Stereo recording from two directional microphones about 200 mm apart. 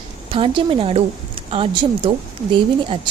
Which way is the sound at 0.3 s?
25° right (ahead or behind).